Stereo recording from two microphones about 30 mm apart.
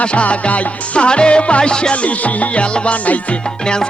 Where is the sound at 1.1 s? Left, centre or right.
Left.